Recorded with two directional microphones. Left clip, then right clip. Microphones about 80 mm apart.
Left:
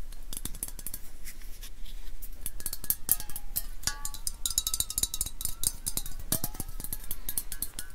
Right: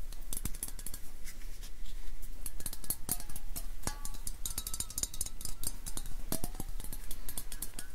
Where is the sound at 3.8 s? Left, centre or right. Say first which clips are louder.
Left 8 dB; left.